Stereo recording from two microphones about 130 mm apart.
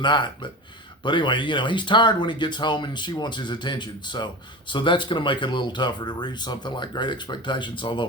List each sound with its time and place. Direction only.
0.0 s speech: 35° left (ahead or behind)